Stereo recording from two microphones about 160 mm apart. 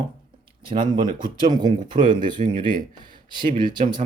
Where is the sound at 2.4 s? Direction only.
60° right (ahead or behind).